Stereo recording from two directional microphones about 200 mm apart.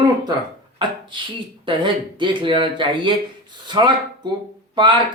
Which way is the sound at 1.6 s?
25° right (ahead or behind).